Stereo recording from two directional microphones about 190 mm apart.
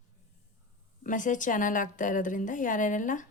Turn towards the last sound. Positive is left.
turn(degrees=45)  # may be behind; listen again after turning